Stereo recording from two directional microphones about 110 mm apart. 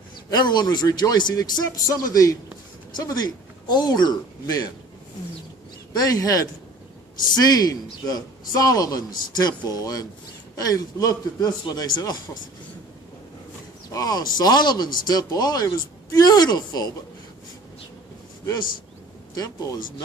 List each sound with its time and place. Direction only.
0.3 s speech: 40° left (ahead or behind)
5.9 s speech: 35° left (ahead or behind)
13.9 s speech: 35° left (ahead or behind)
19.3 s speech: 35° left (ahead or behind)